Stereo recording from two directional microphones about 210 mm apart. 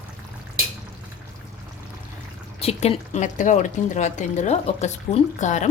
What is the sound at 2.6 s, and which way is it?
Speech, 30° left (ahead or behind).